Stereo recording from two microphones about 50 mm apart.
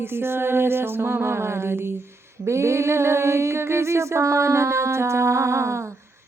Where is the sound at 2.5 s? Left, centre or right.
Right.